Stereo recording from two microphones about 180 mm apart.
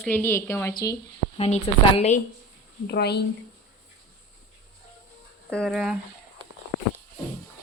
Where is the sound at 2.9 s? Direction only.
65° left (ahead or behind).